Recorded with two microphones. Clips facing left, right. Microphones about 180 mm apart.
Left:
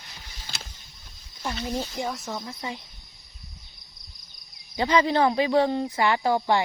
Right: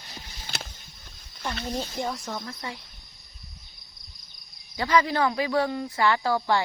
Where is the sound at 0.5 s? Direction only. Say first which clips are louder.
Right 6 dB; 55° right (ahead or behind).